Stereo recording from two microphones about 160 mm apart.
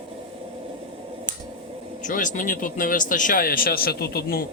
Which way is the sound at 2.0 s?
55° left (ahead or behind).